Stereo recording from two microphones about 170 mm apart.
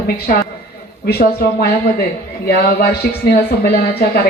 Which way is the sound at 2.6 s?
65° left (ahead or behind).